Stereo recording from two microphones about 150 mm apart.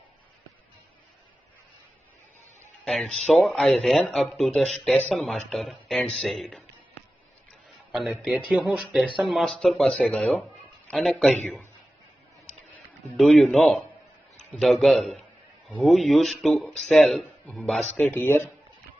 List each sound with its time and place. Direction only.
2.8 s speech: centre (ahead or behind)
7.9 s speech: 5° right (ahead or behind)
13.1 s a man's voice: centre (ahead or behind)